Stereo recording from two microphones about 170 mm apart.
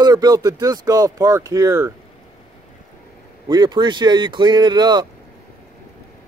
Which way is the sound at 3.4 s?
25° right (ahead or behind).